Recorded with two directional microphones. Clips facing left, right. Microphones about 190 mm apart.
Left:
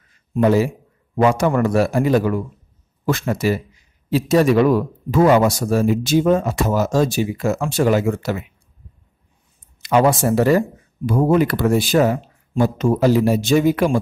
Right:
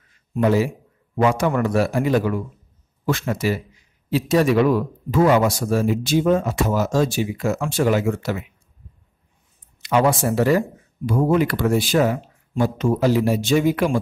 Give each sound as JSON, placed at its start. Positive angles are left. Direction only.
{"t": 0.4, "sound": "a man's voice", "side_deg": 40}
{"t": 9.8, "sound": "a man's voice", "side_deg": 45}